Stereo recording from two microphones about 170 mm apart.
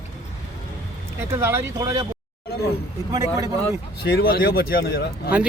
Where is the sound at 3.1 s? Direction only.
20° right (ahead or behind).